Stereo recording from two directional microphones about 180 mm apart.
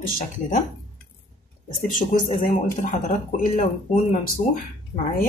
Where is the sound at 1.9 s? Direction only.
45° left (ahead or behind).